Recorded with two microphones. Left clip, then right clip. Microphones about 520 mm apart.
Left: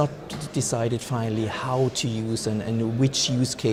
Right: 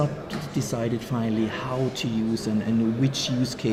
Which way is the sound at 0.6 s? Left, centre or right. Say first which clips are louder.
Left 3 dB; left.